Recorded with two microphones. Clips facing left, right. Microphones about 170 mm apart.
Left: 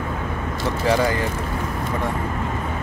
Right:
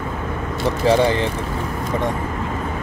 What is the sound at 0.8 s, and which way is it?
Speech, 25° right (ahead or behind).